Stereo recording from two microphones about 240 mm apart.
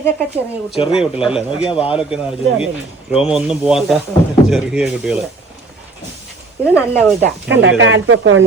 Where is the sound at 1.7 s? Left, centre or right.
Left.